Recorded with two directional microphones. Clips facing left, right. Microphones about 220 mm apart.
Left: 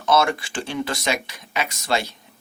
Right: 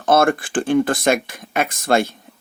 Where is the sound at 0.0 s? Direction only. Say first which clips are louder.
Right 4 dB; 50° right (ahead or behind).